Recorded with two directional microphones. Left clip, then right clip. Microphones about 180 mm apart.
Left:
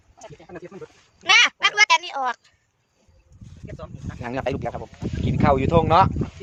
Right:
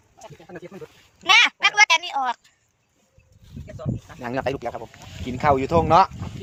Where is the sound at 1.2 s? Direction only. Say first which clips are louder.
Even; 60° left (ahead or behind).